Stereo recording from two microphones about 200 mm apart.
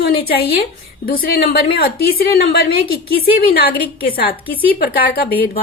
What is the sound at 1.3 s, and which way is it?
Speech, 50° left (ahead or behind).